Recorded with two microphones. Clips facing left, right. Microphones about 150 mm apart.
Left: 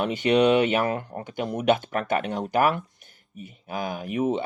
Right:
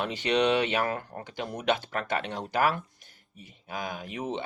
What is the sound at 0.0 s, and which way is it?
Speech, 20° left (ahead or behind).